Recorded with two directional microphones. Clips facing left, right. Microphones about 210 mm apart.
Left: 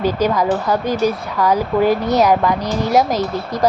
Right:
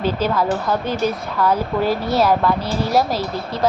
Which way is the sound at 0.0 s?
15° left (ahead or behind).